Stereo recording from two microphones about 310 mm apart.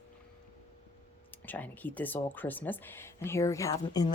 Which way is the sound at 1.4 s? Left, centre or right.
Centre.